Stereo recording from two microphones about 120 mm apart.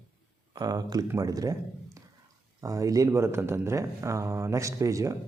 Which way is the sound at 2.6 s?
30° right (ahead or behind).